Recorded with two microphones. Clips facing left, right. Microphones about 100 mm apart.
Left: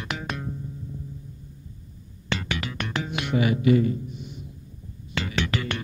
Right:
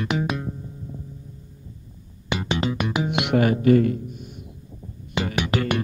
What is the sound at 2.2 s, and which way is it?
Music, 20° right (ahead or behind).